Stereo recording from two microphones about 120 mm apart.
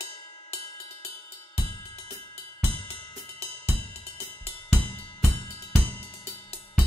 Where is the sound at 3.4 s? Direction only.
55° left (ahead or behind).